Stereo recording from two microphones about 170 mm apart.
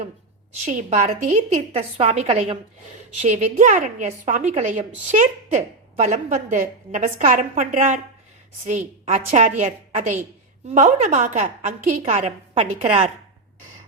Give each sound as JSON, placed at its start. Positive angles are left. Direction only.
{"t": 0.6, "sound": "a woman's voice", "side_deg": -45}
{"t": 9.0, "sound": "a woman's voice", "side_deg": -45}